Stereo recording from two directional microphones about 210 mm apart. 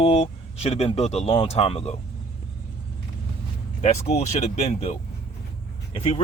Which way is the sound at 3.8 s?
30° left (ahead or behind).